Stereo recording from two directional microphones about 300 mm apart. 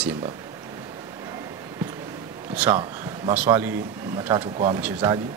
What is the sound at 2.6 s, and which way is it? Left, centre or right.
A man's voice, centre.